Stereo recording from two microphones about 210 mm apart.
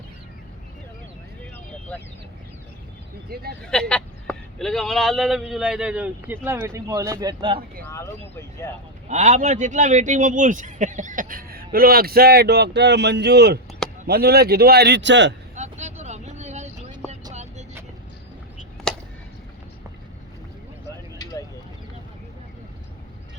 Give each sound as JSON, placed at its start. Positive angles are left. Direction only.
{"t": 1.9, "sound": "speech", "side_deg": 5}
{"t": 3.2, "sound": "speech", "side_deg": -45}
{"t": 3.6, "sound": "speech", "side_deg": 5}
{"t": 7.9, "sound": "speech", "side_deg": 15}
{"t": 9.0, "sound": "a man's voice", "side_deg": -35}
{"t": 15.5, "sound": "vehicle", "side_deg": -35}
{"t": 18.9, "sound": "a sound", "side_deg": 5}